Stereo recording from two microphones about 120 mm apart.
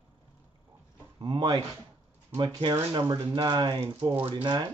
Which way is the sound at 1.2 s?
40° right (ahead or behind).